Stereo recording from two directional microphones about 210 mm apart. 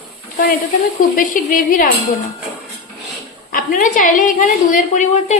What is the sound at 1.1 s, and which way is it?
Speech, 40° left (ahead or behind).